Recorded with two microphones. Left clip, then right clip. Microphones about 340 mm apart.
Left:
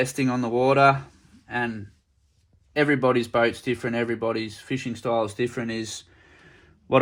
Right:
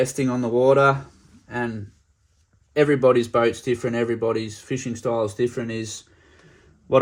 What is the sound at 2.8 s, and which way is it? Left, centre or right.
Speech, centre.